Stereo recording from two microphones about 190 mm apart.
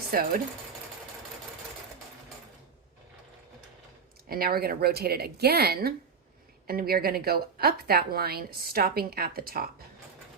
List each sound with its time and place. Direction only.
0.1 s a woman's voice: 50° right (ahead or behind)
4.3 s a woman's voice: 50° right (ahead or behind)